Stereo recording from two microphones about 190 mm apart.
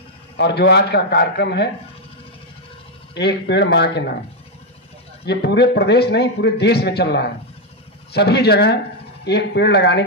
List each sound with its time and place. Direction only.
0.4 s a man's voice: 60° left (ahead or behind)
3.2 s a man's voice: 65° left (ahead or behind)
5.2 s a man's voice: 60° left (ahead or behind)